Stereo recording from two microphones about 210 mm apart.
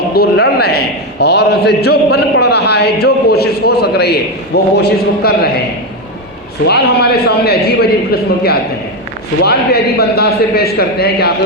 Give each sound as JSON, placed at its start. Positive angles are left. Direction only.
{"t": 0.1, "sound": "a man's voice", "side_deg": 50}
{"t": 6.7, "sound": "a man's voice", "side_deg": 50}
{"t": 9.4, "sound": "a man's voice", "side_deg": 50}